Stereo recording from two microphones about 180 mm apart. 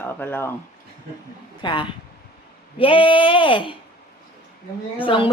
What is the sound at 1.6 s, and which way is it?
Speech, 25° left (ahead or behind).